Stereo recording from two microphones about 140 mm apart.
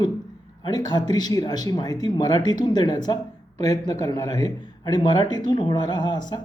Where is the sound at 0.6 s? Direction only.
30° left (ahead or behind).